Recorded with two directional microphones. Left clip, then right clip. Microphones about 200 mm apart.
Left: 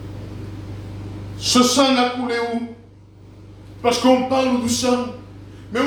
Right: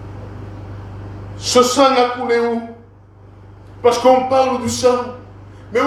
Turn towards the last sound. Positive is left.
turn(degrees=30)  # may be behind; listen again after turning